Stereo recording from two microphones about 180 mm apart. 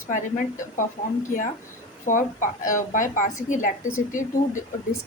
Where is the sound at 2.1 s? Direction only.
45° left (ahead or behind).